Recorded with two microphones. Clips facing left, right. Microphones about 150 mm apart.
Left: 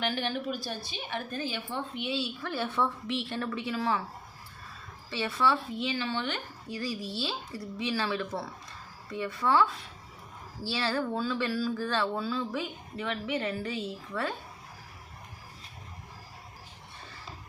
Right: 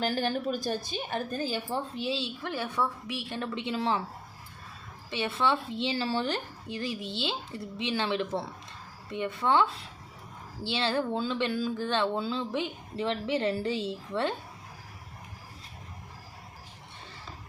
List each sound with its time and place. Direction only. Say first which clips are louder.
0.0 s a woman's voice: right 3 dB; 40° right (ahead or behind)
5.1 s speech: even; 20° right (ahead or behind)